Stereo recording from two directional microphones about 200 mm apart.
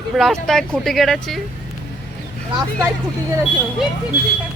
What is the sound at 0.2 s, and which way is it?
Speech, centre (ahead or behind).